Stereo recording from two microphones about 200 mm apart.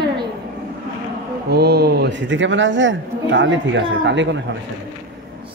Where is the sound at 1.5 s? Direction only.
50° right (ahead or behind).